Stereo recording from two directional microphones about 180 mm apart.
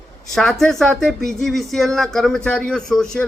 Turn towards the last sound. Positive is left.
turn(degrees=5)  # may be behind; listen again after turning